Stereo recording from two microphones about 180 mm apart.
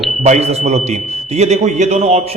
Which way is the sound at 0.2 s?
35° right (ahead or behind).